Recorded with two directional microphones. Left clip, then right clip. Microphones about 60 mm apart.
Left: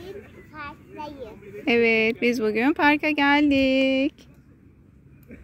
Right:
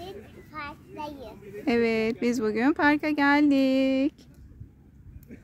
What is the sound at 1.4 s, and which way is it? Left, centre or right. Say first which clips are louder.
Speech: left 5 dB; right.